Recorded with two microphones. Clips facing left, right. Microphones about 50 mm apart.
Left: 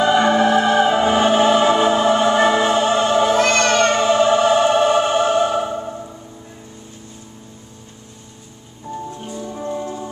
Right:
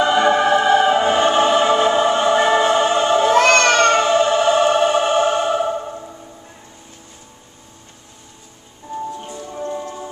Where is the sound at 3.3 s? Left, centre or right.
Right.